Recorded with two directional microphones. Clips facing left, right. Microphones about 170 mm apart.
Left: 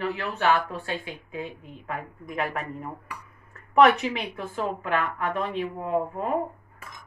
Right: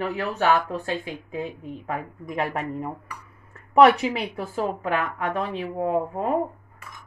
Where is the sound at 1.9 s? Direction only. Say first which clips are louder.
Right 2 dB; 35° right (ahead or behind).